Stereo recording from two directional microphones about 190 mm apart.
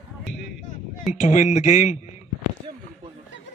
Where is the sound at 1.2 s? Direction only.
40° left (ahead or behind).